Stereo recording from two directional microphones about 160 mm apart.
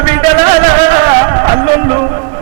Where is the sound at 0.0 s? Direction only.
40° right (ahead or behind).